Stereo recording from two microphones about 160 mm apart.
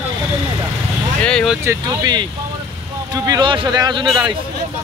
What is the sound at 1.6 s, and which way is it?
Speech, 20° right (ahead or behind).